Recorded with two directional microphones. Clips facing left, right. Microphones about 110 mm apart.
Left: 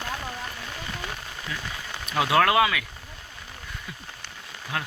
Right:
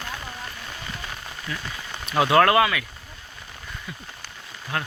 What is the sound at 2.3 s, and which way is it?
Speech, 5° left (ahead or behind).